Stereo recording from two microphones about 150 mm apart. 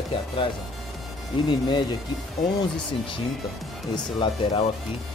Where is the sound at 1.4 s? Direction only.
30° left (ahead or behind).